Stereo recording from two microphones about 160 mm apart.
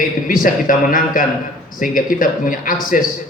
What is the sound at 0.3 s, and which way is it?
Speech, 55° left (ahead or behind).